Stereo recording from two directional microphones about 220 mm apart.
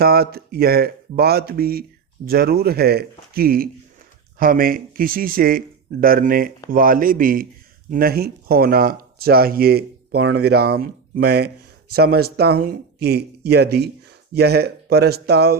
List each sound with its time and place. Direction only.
0.0 s speech: 45° right (ahead or behind)